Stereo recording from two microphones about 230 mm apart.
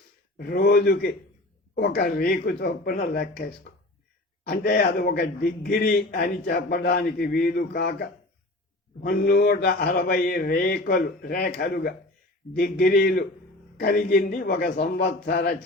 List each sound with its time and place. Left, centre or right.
0.3 s a man's voice: left